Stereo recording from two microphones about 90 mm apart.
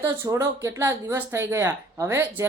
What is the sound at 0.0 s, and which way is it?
Speech, 30° right (ahead or behind).